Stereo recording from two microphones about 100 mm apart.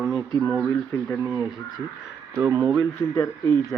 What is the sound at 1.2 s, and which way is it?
Speech, 20° right (ahead or behind).